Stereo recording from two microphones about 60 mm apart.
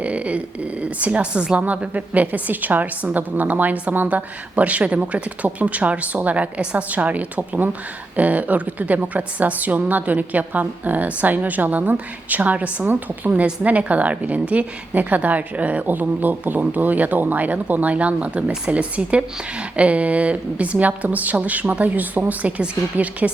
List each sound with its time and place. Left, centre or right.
0.0 s a woman's voice: right